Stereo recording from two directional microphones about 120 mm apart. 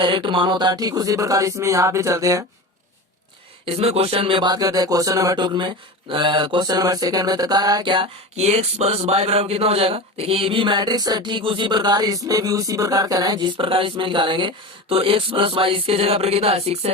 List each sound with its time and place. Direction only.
0.0 s speech: 45° right (ahead or behind); by 2.4 s 25° right (ahead or behind)
3.7 s music: 55° right (ahead or behind); by 8.0 s 40° right (ahead or behind)
8.4 s speech: 60° right (ahead or behind)